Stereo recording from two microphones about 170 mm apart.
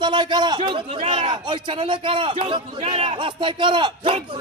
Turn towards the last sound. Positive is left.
turn(degrees=-30)  # may be behind; listen again after turning